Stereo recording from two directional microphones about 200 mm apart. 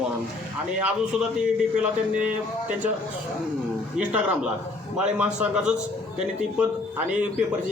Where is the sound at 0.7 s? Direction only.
5° right (ahead or behind).